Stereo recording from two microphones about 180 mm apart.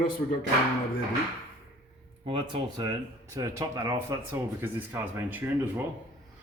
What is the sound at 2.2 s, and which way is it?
Speech, 30° right (ahead or behind).